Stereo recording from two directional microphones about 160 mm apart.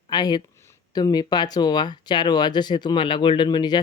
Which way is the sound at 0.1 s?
25° left (ahead or behind).